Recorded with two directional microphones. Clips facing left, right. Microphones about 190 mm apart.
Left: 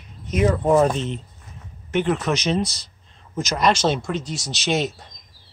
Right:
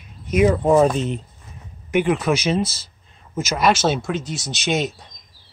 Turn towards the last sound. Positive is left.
turn(degrees=0)  # may be behind; listen again after turning